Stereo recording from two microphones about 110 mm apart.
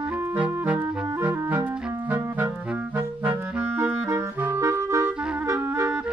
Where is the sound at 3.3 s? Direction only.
20° right (ahead or behind).